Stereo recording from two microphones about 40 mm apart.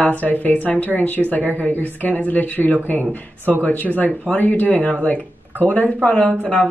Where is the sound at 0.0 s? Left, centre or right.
Left.